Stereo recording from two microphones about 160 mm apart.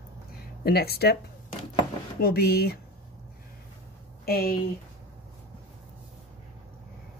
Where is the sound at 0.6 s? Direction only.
75° left (ahead or behind).